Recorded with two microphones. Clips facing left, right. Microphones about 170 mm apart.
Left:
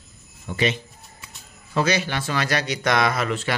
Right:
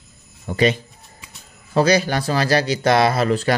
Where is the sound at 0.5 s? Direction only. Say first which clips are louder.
Right 6 dB; 40° right (ahead or behind).